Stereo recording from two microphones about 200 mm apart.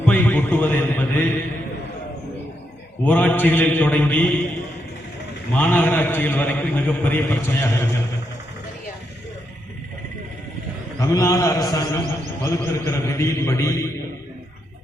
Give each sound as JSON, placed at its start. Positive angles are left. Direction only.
{"t": 0.0, "sound": "mantra", "side_deg": 10}
{"t": 3.0, "sound": "a man's voice", "side_deg": 10}
{"t": 5.5, "sound": "a man's voice", "side_deg": 10}
{"t": 11.0, "sound": "a man's voice", "side_deg": 15}